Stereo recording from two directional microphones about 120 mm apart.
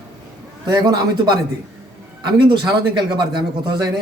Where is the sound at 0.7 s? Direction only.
35° right (ahead or behind).